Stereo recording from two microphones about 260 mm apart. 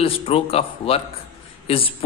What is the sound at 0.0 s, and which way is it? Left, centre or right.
Speech, left.